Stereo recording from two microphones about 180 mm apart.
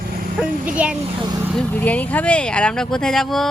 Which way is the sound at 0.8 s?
5° right (ahead or behind).